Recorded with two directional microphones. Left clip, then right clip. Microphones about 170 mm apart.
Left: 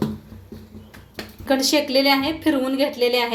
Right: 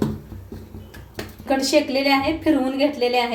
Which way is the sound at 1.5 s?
55° left (ahead or behind).